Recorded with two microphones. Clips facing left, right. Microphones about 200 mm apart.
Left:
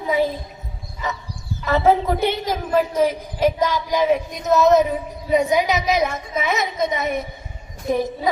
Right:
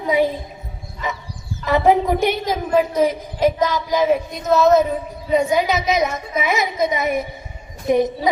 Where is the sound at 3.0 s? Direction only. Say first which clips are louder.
Right 1 dB; 10° left (ahead or behind).